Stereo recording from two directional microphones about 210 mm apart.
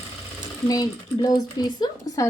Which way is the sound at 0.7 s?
20° left (ahead or behind).